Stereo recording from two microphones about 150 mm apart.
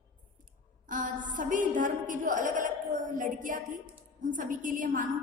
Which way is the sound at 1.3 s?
60° right (ahead or behind).